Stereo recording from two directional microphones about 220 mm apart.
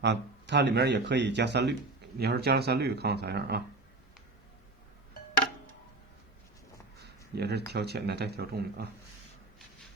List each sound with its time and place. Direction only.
0.0 s speech: 50° right (ahead or behind)
7.0 s a sound: 50° right (ahead or behind)
7.7 s speech: 50° right (ahead or behind)